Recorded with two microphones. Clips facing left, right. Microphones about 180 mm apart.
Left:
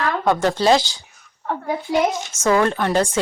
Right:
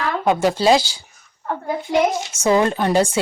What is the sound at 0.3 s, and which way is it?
Speech, 10° right (ahead or behind).